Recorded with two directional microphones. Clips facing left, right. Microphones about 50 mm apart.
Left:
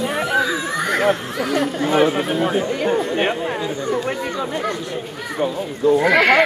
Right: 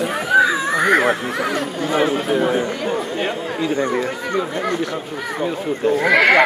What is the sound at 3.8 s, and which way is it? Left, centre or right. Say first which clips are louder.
Speech: right 1 dB; right.